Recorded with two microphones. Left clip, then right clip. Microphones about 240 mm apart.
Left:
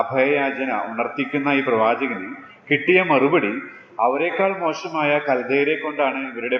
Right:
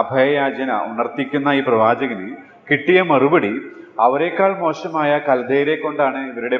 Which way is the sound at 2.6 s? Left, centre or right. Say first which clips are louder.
Right 2 dB; right.